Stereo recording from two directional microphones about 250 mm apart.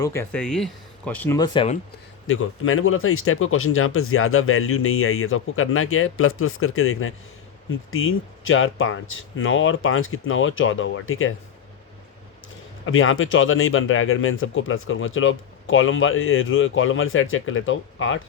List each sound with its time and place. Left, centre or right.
0.0 s speech: centre
2.2 s speech: left
12.8 s speech: left